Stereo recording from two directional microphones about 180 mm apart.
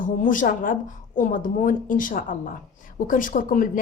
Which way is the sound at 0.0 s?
50° left (ahead or behind).